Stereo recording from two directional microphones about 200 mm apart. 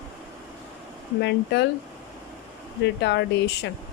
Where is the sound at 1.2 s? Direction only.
60° left (ahead or behind).